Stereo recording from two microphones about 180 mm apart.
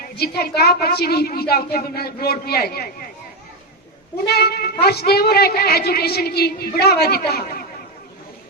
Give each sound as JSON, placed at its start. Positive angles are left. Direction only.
{"t": 0.0, "sound": "a woman's voice", "side_deg": 60}
{"t": 4.3, "sound": "a woman's voice", "side_deg": 60}